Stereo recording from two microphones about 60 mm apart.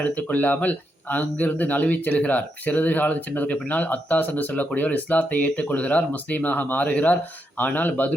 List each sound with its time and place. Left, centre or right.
0.0 s speech: left